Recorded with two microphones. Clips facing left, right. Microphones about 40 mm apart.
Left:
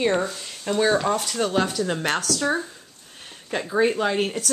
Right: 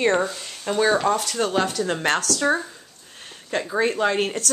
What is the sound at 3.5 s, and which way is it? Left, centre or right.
Speech, centre.